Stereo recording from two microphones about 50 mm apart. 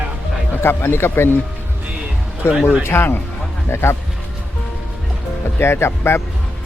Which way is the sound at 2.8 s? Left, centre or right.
Left.